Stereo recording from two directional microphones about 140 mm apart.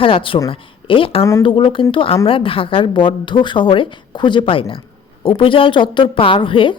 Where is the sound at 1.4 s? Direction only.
40° left (ahead or behind).